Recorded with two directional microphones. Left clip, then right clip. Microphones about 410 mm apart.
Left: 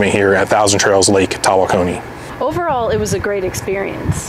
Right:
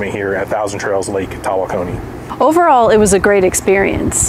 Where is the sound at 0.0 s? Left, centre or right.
Left.